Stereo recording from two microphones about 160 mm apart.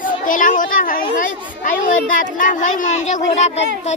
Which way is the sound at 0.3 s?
55° left (ahead or behind).